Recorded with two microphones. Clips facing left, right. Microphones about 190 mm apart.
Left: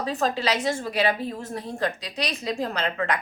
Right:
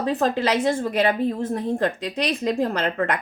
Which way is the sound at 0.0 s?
55° right (ahead or behind).